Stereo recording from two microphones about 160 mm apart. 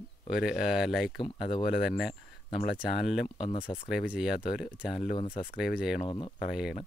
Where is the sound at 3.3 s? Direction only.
30° left (ahead or behind).